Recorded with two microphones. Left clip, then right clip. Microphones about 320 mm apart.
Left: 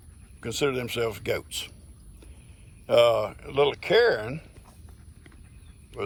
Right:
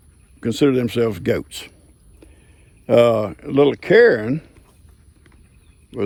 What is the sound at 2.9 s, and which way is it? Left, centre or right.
Speech, right.